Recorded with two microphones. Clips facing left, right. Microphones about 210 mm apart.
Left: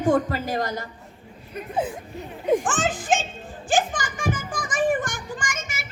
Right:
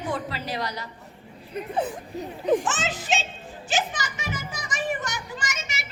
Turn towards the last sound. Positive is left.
turn(degrees=50)  # may be behind; listen again after turning